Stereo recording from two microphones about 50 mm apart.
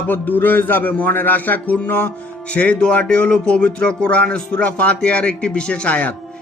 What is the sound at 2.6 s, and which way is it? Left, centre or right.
Speech, left.